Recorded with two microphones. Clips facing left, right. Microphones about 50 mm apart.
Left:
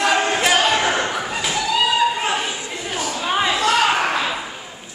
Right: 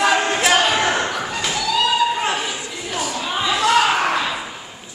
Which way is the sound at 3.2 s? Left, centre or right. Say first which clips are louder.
Left 5 dB; left.